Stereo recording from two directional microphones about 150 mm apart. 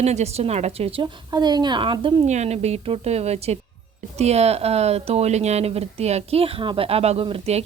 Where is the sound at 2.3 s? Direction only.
50° right (ahead or behind).